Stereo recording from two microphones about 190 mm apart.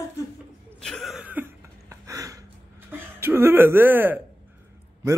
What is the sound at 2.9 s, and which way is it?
A man's voice, 10° right (ahead or behind).